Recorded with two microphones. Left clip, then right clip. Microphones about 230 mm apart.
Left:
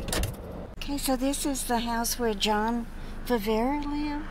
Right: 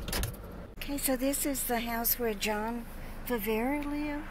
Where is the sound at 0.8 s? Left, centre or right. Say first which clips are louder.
Left 3 dB; centre.